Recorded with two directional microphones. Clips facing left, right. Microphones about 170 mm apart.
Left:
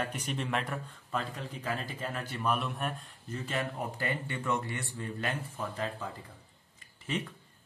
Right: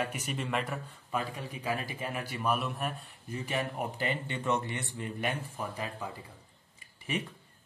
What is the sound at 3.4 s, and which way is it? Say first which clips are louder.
A man's voice: right 1 dB; 15° right (ahead or behind).